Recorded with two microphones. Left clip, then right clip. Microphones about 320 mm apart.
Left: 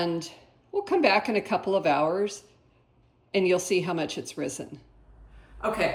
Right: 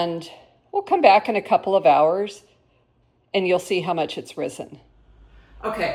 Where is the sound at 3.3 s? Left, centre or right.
Centre.